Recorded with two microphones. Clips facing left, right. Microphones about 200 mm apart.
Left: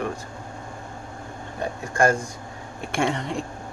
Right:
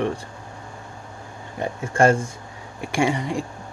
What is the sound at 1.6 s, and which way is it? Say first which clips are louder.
Speech: right 3 dB; 25° right (ahead or behind).